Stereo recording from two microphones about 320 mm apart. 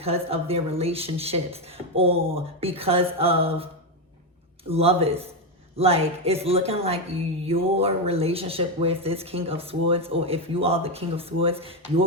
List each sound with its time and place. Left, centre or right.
0.0 s speech: centre
4.7 s speech: centre